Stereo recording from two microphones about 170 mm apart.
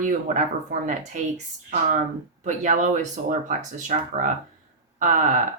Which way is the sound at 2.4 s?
45° right (ahead or behind).